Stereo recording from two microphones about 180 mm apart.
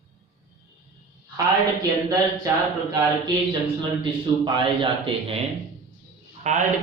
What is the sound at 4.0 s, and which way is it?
A man's voice, 25° right (ahead or behind).